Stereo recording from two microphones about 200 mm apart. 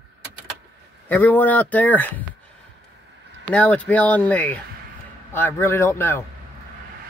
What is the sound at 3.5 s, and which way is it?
A man's voice, 5° left (ahead or behind).